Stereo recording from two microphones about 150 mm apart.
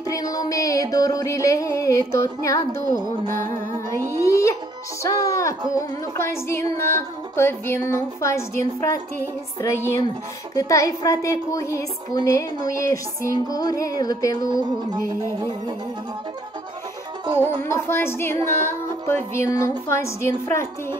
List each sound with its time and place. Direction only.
0.1 s music: 25° left (ahead or behind)
4.2 s a child's voice: 20° left (ahead or behind)
5.0 s music: 20° left (ahead or behind)
17.6 s music: 15° left (ahead or behind)